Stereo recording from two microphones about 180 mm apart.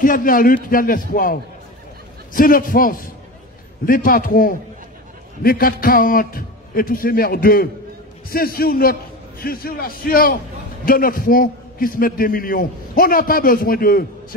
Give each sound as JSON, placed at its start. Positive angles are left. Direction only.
{"t": 0.0, "sound": "a man's voice", "side_deg": 50}